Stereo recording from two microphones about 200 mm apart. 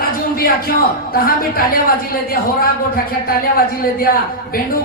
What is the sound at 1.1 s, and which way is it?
Speech, 45° left (ahead or behind).